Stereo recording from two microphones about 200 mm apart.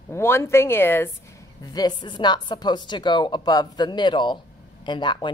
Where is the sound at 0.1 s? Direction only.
10° left (ahead or behind).